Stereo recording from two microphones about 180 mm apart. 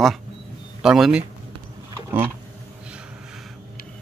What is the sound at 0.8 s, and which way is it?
Speech, 5° right (ahead or behind).